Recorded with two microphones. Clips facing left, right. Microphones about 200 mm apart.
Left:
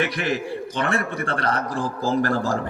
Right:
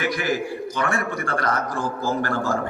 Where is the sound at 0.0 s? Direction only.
30° left (ahead or behind).